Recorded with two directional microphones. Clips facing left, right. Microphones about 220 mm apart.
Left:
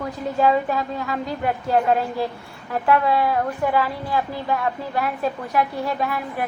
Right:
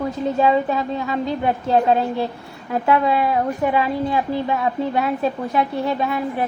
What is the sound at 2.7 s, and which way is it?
A woman's voice, 20° right (ahead or behind).